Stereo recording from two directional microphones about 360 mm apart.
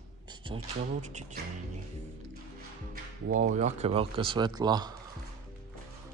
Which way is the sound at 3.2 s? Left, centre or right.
Right.